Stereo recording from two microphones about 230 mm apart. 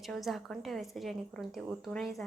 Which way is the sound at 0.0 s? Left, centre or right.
Centre.